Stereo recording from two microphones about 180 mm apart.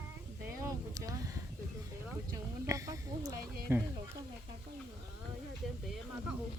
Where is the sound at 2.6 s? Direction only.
20° right (ahead or behind).